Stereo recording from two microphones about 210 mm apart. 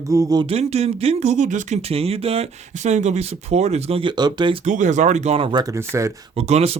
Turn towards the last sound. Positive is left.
turn(degrees=-30)  # may be behind; listen again after turning